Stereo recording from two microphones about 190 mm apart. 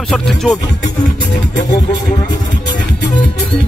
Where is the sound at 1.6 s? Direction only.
20° left (ahead or behind).